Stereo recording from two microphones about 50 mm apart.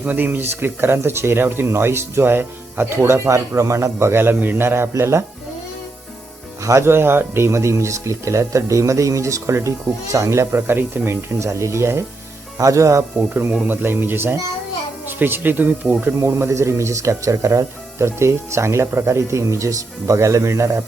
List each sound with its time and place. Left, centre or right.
0.0 s speech: right
1.6 s speech: right
3.9 s speech: right
6.6 s speech: right
6.8 s speech: right
10.7 s speech: right
11.3 s speech: right
12.5 s speech: right
13.7 s speech: right
16.2 s speech: right
18.9 s speech: right